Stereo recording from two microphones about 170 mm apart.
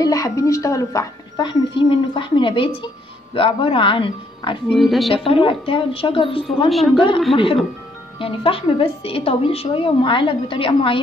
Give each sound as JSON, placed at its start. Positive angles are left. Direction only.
{"t": 0.0, "sound": "a woman's voice", "side_deg": 20}
{"t": 4.7, "sound": "speech", "side_deg": 0}
{"t": 5.1, "sound": "a woman's voice", "side_deg": 35}
{"t": 6.7, "sound": "speech", "side_deg": 0}
{"t": 8.2, "sound": "a woman's voice", "side_deg": 30}